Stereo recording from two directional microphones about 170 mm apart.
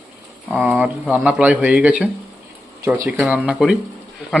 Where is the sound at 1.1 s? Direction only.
10° right (ahead or behind).